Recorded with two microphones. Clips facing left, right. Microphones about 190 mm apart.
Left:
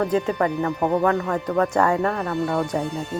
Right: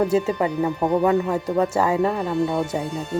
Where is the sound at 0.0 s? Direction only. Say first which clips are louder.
Right 1 dB; 10° right (ahead or behind).